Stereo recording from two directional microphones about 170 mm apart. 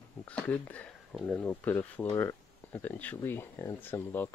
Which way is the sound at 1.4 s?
10° left (ahead or behind).